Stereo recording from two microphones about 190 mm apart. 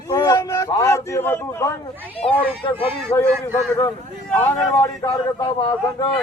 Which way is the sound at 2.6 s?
25° left (ahead or behind).